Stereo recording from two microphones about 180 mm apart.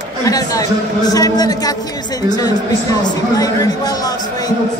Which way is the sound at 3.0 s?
20° left (ahead or behind).